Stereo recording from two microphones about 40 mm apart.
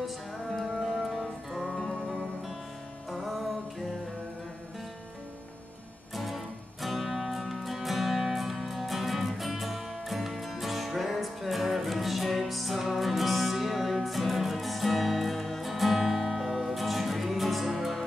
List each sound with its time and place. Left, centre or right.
0.6 s music: centre
6.1 s music: centre